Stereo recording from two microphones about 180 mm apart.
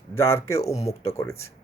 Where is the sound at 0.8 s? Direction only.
35° left (ahead or behind).